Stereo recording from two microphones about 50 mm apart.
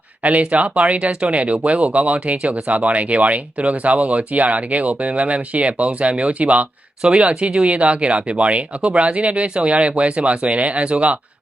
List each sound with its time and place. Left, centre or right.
0.2 s speech: right